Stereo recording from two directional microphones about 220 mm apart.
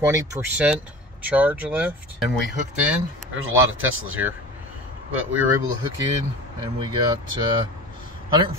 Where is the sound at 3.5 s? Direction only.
65° right (ahead or behind).